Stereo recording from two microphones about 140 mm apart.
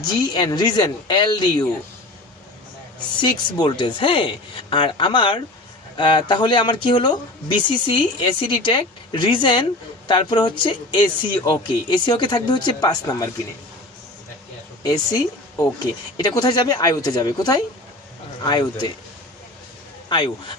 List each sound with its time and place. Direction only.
0.0 s speech: 30° left (ahead or behind)
3.2 s speech: 35° left (ahead or behind)
14.9 s speech: 25° left (ahead or behind)
20.1 s speech: 35° left (ahead or behind)